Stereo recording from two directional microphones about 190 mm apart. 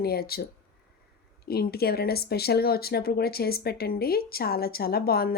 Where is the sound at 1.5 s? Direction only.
55° left (ahead or behind).